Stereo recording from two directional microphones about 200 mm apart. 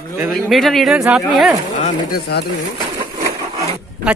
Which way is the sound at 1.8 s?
45° left (ahead or behind).